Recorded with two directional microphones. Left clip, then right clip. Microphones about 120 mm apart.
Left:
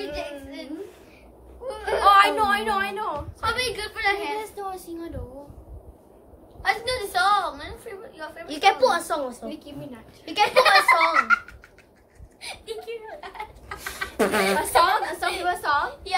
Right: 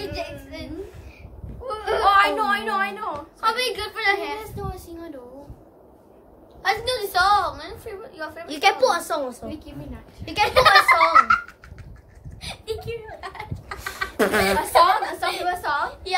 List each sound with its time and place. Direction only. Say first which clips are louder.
0.0 s a sound: right 1 dB; 40° right (ahead or behind)
1.7 s a sound: right 2 dB; 40° right (ahead or behind)
2.0 s singing: left 1 dB; 40° left (ahead or behind)
3.3 s a woman's voice: right 4 dB; 40° right (ahead or behind)
4.4 s child singing: left 2 dB; 30° left (ahead or behind)
6.6 s a woman's voice: right 2 dB; 40° right (ahead or behind)
8.5 s a woman's voice: even; 15° right (ahead or behind)
10.5 s a woman's voice: right 3 dB; 40° right (ahead or behind)
13.2 s a sound: right 2 dB; 50° right (ahead or behind)
14.1 s chicken: right 2 dB; 15° right (ahead or behind)
14.8 s a woman's voice: right 3 dB; 40° left (ahead or behind)
15.9 s a woman's voice: right 1 dB; 40° right (ahead or behind)